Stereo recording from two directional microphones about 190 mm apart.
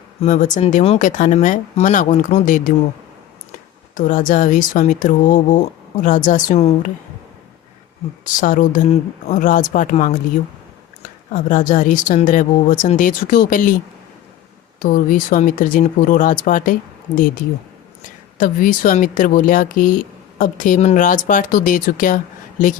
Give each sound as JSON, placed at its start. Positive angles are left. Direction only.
{"t": 0.2, "sound": "speech", "side_deg": 40}
{"t": 3.9, "sound": "speech", "side_deg": 45}
{"t": 8.2, "sound": "speech", "side_deg": 45}
{"t": 11.3, "sound": "speech", "side_deg": 40}
{"t": 14.8, "sound": "speech", "side_deg": 45}
{"t": 18.3, "sound": "speech", "side_deg": 45}